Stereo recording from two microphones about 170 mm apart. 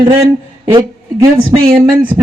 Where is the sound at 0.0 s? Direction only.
20° right (ahead or behind).